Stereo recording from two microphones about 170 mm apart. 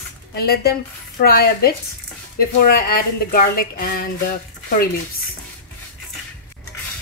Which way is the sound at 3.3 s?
60° left (ahead or behind).